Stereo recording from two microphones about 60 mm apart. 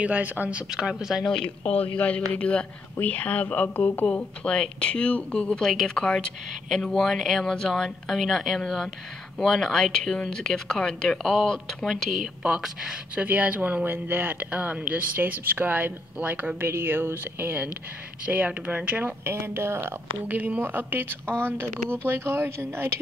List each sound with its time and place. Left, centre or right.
0.0 s speech: right
0.7 s speech: centre
1.2 s a man's voice: centre; by 4.0 s left
4.4 s speech: centre
13.1 s speech: right
16.5 s a woman's voice: right
19.2 s speech: right
20.2 s a woman's voice: right